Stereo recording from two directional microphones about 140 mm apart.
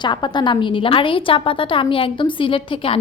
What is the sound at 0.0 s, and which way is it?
Speech, 30° left (ahead or behind).